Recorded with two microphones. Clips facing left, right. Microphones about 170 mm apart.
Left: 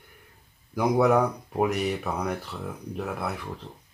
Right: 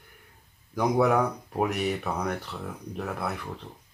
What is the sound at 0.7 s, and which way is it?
Speech, centre (ahead or behind).